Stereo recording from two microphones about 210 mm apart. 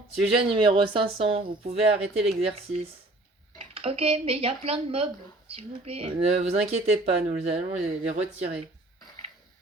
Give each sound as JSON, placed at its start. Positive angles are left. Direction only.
{"t": 0.3, "sound": "speech", "side_deg": -25}